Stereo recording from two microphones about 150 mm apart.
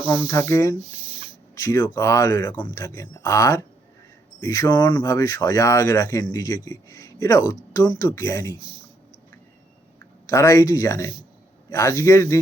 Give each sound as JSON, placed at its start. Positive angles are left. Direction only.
{"t": 0.1, "sound": "speech", "side_deg": 20}
{"t": 10.2, "sound": "speech", "side_deg": 20}